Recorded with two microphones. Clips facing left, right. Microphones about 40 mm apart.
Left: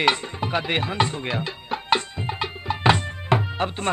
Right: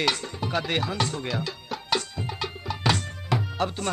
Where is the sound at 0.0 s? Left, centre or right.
Left.